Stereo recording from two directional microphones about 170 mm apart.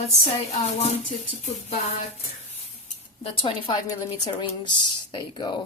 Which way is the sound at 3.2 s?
35° left (ahead or behind).